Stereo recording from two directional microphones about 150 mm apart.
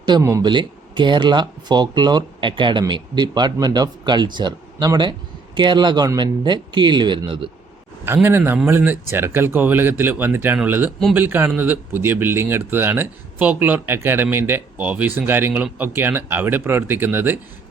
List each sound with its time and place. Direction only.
0.0 s speech: 25° right (ahead or behind)
0.5 s speech: 30° right (ahead or behind)
8.0 s speech: 15° right (ahead or behind)